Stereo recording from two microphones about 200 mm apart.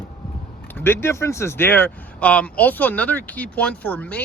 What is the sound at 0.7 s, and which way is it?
Speech, 10° left (ahead or behind).